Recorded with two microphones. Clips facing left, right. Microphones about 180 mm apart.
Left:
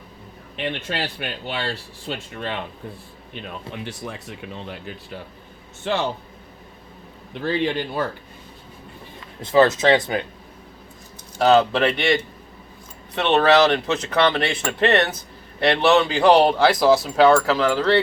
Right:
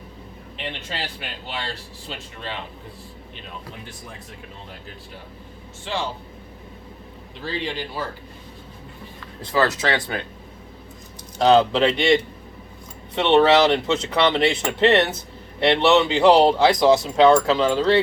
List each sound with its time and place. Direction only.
0.5 s speech: 60° left (ahead or behind)
3.7 s speech: 75° left (ahead or behind)
5.8 s speech: 60° left (ahead or behind)
7.3 s speech: 55° left (ahead or behind)
9.4 s speech: 20° left (ahead or behind)
11.3 s speech: 20° right (ahead or behind)
16.8 s speech: 5° left (ahead or behind)
17.3 s speech: 20° right (ahead or behind)